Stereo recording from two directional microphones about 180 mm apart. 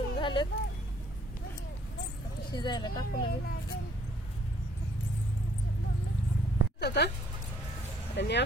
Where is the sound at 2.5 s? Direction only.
25° left (ahead or behind).